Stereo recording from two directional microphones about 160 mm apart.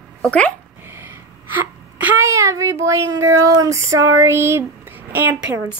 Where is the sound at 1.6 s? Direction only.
10° right (ahead or behind).